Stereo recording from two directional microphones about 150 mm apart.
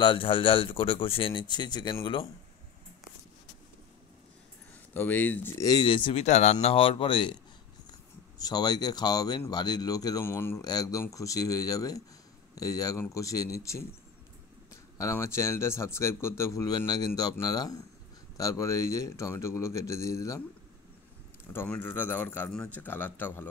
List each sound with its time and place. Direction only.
0.0 s speech: 35° left (ahead or behind)
4.9 s a man's voice: 10° left (ahead or behind)
5.6 s speech: 25° left (ahead or behind)
6.2 s speech: 50° left (ahead or behind); by 7.3 s 35° left (ahead or behind)
8.4 s speech: 25° left (ahead or behind)
21.5 s a man's voice: 15° left (ahead or behind)